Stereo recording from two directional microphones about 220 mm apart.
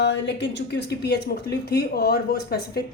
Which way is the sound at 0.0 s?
55° left (ahead or behind).